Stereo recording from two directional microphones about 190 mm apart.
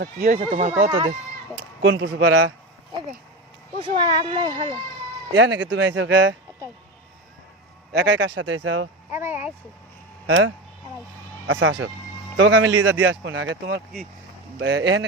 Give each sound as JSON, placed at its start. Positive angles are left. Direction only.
{"t": 0.3, "sound": "speech", "side_deg": -45}
{"t": 0.9, "sound": "speech", "side_deg": -25}
{"t": 1.8, "sound": "speech", "side_deg": -75}
{"t": 3.8, "sound": "speech", "side_deg": -25}
{"t": 5.3, "sound": "speech", "side_deg": -70}
{"t": 7.9, "sound": "speech", "side_deg": -70}
{"t": 9.1, "sound": "speech", "side_deg": -10}
{"t": 10.2, "sound": "speech", "side_deg": -75}
{"t": 11.4, "sound": "speech", "side_deg": -90}
{"t": 12.4, "sound": "speech", "side_deg": -80}
{"t": 12.8, "sound": "speech", "side_deg": -90}